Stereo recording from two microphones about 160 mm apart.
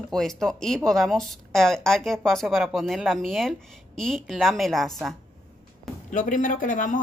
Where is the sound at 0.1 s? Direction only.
5° left (ahead or behind).